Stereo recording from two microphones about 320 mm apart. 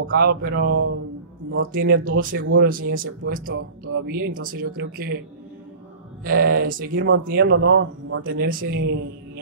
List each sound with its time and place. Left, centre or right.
0.0 s speech: right
6.2 s speech: right